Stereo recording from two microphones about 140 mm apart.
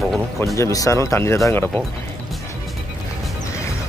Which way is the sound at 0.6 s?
25° left (ahead or behind).